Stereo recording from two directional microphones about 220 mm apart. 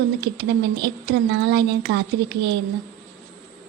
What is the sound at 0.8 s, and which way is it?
A woman's voice, 50° right (ahead or behind).